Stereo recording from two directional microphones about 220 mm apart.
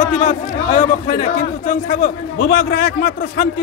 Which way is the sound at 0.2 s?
35° left (ahead or behind).